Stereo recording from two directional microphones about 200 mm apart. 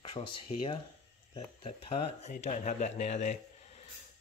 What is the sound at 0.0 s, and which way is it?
A man's voice, 25° left (ahead or behind).